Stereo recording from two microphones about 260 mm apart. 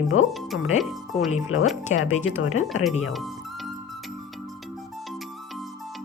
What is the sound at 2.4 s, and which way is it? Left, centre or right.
Speech, left.